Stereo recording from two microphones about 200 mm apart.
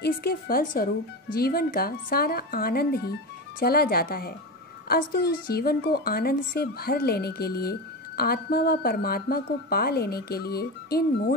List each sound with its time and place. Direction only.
0.0 s speech: 50° left (ahead or behind)